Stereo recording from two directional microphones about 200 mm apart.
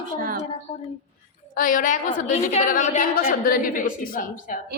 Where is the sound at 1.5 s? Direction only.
40° left (ahead or behind).